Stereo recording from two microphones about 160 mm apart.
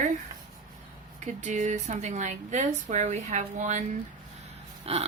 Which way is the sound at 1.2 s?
50° right (ahead or behind).